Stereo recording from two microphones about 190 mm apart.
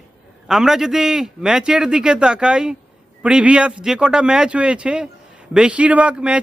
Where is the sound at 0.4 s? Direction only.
Centre (ahead or behind).